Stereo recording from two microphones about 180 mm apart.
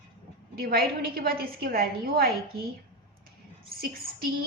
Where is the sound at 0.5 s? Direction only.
55° right (ahead or behind).